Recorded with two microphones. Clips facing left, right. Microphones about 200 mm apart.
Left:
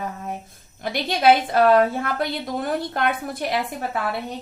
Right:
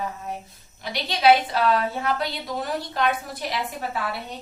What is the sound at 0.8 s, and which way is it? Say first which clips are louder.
A woman's voice: left 3 dB; 50° left (ahead or behind).